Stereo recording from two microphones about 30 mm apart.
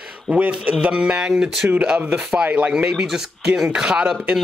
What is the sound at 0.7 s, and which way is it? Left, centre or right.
Speech, right.